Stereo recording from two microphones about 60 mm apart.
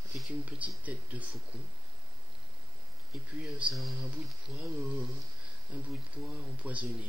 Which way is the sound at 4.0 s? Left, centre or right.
Centre.